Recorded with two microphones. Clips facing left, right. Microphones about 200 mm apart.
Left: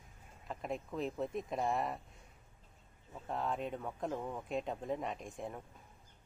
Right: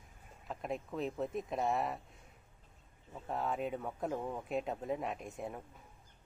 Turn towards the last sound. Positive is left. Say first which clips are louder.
# right 1 dB
turn(degrees=-5)  # may be behind; listen again after turning